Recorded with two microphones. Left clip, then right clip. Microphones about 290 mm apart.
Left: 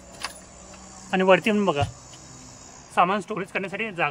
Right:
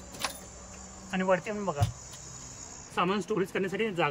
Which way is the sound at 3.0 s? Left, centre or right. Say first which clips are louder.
Left 7 dB; centre.